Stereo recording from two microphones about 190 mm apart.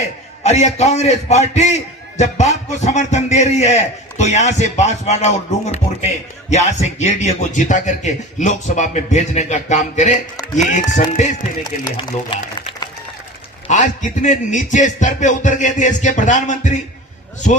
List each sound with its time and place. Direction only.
0.4 s speech: 35° left (ahead or behind)
11.9 s speech: 25° left (ahead or behind)
13.7 s speech: 40° left (ahead or behind)